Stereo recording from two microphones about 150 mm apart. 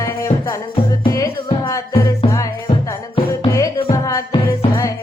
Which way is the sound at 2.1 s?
20° left (ahead or behind).